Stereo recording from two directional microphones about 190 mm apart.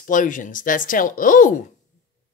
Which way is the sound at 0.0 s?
45° left (ahead or behind).